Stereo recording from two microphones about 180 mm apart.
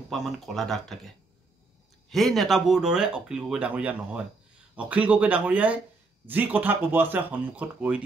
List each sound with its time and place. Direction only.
0.1 s speech: centre (ahead or behind)